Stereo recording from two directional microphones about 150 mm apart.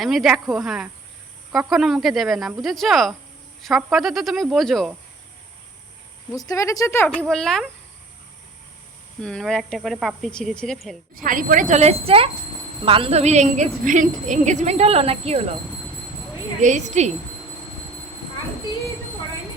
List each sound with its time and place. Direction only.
0.0 s speech: centre (ahead or behind)
6.3 s speech: 25° left (ahead or behind)
7.2 s speech: 5° left (ahead or behind)
9.2 s speech: 5° left (ahead or behind)
11.1 s a woman's voice: 65° right (ahead or behind); by 15.4 s 40° right (ahead or behind)
16.6 s a woman's voice: 55° right (ahead or behind)